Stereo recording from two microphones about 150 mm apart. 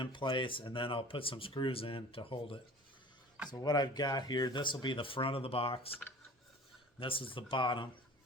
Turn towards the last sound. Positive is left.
turn(degrees=35)  # may be behind; listen again after turning